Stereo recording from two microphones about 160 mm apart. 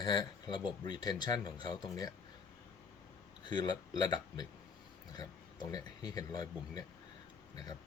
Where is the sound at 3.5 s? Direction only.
25° left (ahead or behind).